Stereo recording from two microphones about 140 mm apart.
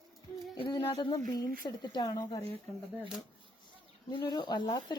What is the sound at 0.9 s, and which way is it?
Speech, 30° left (ahead or behind).